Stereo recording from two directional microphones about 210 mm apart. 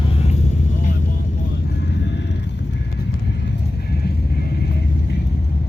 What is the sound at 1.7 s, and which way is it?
Vehicle, 55° left (ahead or behind).